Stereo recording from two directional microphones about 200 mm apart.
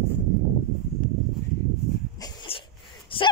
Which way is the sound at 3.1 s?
25° left (ahead or behind).